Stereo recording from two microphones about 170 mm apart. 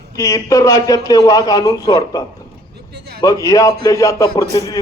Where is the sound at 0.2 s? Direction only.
20° left (ahead or behind).